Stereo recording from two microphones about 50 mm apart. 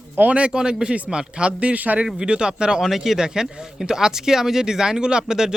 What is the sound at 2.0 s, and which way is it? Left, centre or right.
Speech, centre.